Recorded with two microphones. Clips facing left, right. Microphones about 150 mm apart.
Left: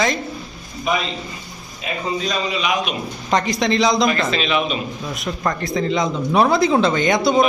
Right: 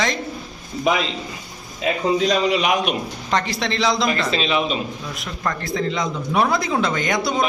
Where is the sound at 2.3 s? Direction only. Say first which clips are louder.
Right 1 dB; 70° right (ahead or behind).